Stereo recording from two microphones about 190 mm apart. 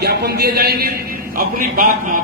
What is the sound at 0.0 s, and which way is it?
A man's voice, 55° right (ahead or behind).